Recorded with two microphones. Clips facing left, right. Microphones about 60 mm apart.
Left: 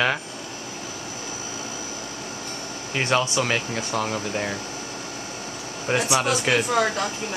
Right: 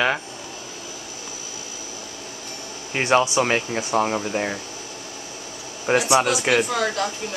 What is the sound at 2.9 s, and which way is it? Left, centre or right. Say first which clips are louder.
Speech: right 4 dB; centre.